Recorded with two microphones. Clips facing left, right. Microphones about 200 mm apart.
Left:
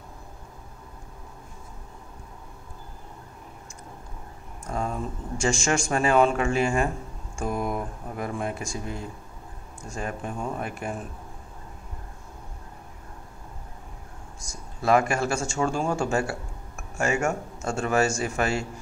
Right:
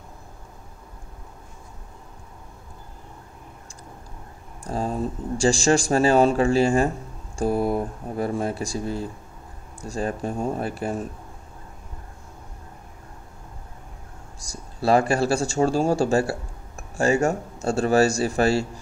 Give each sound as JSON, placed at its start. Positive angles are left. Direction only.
{"t": 4.6, "sound": "speech", "side_deg": -30}
{"t": 14.4, "sound": "speech", "side_deg": -35}